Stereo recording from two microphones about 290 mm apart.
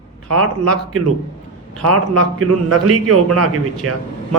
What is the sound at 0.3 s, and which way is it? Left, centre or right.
A man's voice, right.